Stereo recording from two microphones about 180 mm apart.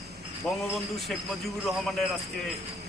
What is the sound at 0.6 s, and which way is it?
Speech, centre (ahead or behind).